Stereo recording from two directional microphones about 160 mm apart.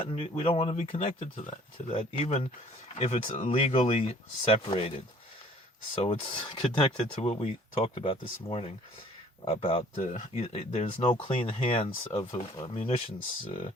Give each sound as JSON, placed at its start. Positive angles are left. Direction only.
{"t": 0.0, "sound": "speech", "side_deg": 35}